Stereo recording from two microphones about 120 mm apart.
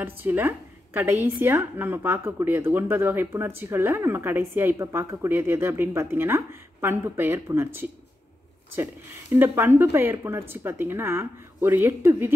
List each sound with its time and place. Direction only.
0.0 s a woman's voice: 15° right (ahead or behind)
9.3 s a woman's voice: 20° right (ahead or behind)